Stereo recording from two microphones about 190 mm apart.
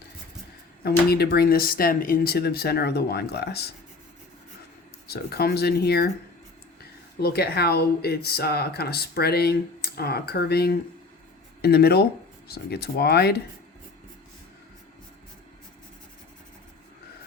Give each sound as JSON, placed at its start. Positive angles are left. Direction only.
{"t": 0.9, "sound": "speech", "side_deg": 55}
{"t": 5.0, "sound": "speech", "side_deg": 55}
{"t": 7.2, "sound": "speech", "side_deg": 55}